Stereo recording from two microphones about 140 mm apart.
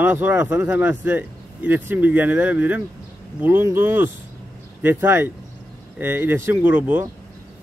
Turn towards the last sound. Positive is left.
turn(degrees=-15)  # may be behind; listen again after turning